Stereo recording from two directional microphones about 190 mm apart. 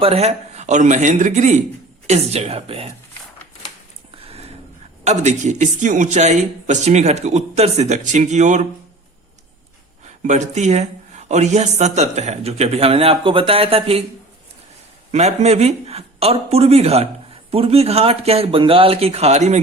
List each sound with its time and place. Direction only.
0.0 s speech: 35° right (ahead or behind)
4.2 s a sound: 30° right (ahead or behind)
5.0 s speech: 40° right (ahead or behind)
10.2 s speech: 40° right (ahead or behind)
15.1 s speech: 35° right (ahead or behind)